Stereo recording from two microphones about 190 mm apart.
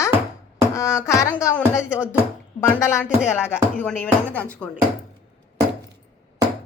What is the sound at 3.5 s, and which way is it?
Speech, 10° left (ahead or behind).